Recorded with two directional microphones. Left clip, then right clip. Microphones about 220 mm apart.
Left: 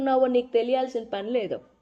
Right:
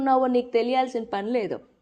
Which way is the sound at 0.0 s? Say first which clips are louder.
Right 1 dB; 20° right (ahead or behind).